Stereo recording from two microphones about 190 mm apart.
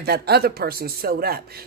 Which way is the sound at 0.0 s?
55° right (ahead or behind).